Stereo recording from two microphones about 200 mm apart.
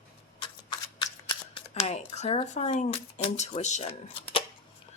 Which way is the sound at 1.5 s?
35° left (ahead or behind).